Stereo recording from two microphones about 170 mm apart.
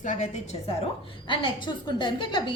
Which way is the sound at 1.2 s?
30° left (ahead or behind).